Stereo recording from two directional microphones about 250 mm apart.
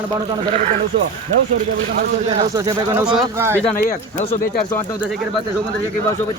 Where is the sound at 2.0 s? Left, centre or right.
Right.